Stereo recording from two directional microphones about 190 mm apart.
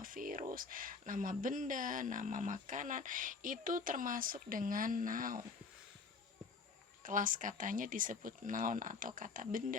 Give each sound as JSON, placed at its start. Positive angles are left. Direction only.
{"t": 0.0, "sound": "speech", "side_deg": -45}
{"t": 7.0, "sound": "speech", "side_deg": -45}